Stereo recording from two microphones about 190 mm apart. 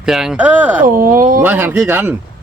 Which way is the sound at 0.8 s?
45° right (ahead or behind).